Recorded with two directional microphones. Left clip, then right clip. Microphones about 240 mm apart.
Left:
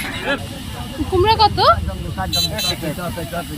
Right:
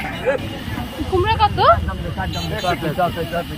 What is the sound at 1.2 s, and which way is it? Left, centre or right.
Speech, centre.